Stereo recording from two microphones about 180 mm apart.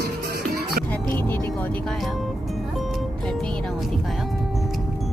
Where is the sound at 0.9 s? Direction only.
10° left (ahead or behind).